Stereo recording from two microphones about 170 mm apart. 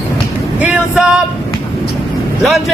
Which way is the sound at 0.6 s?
5° right (ahead or behind).